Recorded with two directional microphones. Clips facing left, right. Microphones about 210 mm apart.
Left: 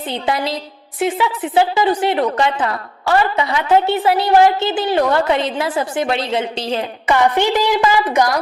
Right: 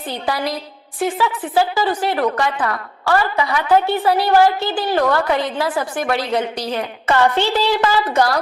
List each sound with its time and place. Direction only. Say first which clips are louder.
0.1 s a woman's voice: left 2 dB; 20° left (ahead or behind)